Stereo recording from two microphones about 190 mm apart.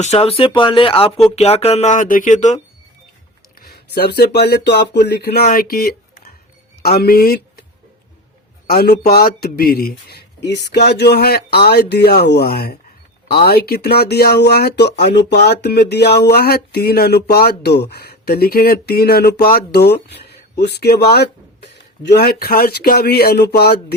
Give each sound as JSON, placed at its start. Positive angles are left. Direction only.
{"t": 0.0, "sound": "speech", "side_deg": 30}
{"t": 3.9, "sound": "speech", "side_deg": 55}
{"t": 8.6, "sound": "speech", "side_deg": 55}